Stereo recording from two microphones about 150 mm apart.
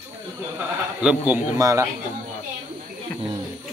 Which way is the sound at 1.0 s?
10° right (ahead or behind).